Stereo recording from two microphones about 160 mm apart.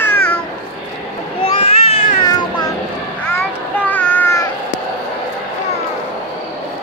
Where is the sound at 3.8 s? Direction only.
10° left (ahead or behind).